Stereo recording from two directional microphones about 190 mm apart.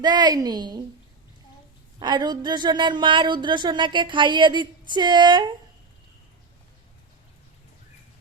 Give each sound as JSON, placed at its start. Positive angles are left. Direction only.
{"t": 0.0, "sound": "speech", "side_deg": -20}
{"t": 2.0, "sound": "speech", "side_deg": -25}